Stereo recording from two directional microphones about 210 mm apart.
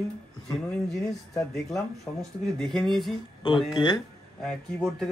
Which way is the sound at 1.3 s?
Centre (ahead or behind).